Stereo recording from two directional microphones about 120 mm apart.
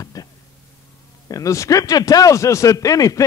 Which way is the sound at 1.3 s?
25° left (ahead or behind).